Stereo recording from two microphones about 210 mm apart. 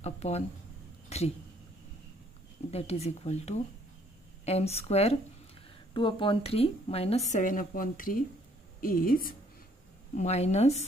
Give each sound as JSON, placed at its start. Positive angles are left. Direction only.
{"t": 0.0, "sound": "speech", "side_deg": 30}
{"t": 1.0, "sound": "a sound", "side_deg": 30}
{"t": 2.7, "sound": "a woman's voice", "side_deg": 30}
{"t": 10.1, "sound": "speech", "side_deg": 30}